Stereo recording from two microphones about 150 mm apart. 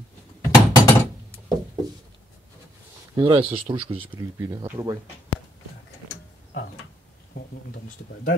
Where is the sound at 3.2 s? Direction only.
40° right (ahead or behind).